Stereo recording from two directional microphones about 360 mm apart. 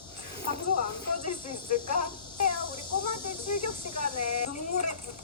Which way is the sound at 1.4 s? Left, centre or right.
Left.